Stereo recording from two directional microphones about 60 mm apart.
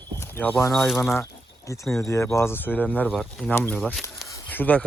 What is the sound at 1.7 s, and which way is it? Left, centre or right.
Speech, left.